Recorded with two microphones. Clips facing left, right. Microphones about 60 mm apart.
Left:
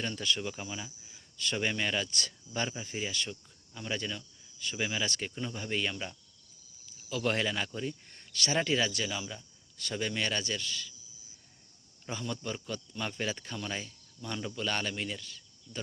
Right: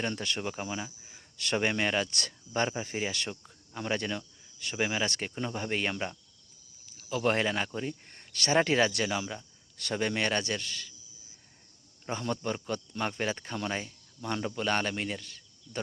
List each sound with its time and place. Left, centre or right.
0.0 s speech: right
1.4 s speech: right
1.6 s speech: right
9.7 s speech: right
12.1 s speech: right
14.2 s speech: right